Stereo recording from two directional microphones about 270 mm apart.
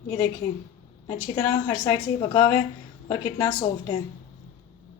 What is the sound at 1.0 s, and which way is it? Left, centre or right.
A woman's voice, centre.